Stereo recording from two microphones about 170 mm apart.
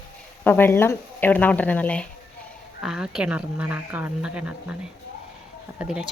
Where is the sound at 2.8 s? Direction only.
5° right (ahead or behind).